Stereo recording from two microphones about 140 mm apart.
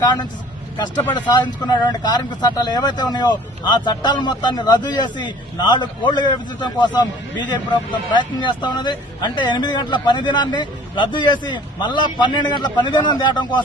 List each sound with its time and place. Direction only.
0.0 s a man's voice: 30° left (ahead or behind)
1.3 s speech: 30° left (ahead or behind)
8.1 s speech: 35° left (ahead or behind)